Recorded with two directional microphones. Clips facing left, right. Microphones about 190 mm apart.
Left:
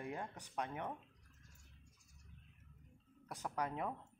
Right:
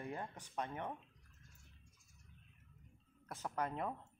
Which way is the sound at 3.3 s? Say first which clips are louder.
Even; 10° left (ahead or behind).